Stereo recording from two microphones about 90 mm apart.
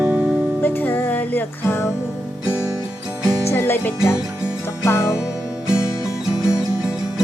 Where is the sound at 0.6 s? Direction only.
20° left (ahead or behind).